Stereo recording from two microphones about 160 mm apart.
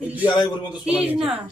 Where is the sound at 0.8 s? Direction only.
5° right (ahead or behind).